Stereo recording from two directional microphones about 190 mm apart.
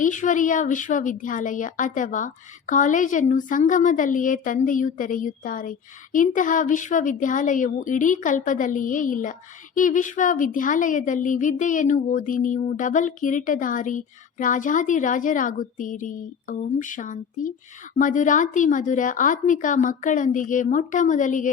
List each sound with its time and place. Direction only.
0.0 s a woman's voice: 40° left (ahead or behind)